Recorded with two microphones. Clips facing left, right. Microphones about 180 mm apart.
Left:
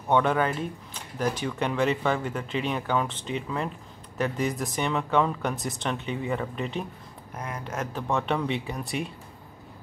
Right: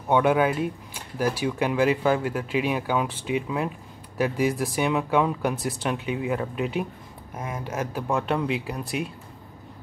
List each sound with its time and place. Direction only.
0.1 s speech: 10° right (ahead or behind)
7.4 s speech: 20° right (ahead or behind)
7.7 s speech: 10° right (ahead or behind)